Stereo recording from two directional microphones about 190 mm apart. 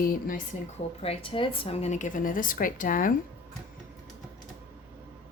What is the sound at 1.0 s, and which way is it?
A woman's voice, 30° left (ahead or behind).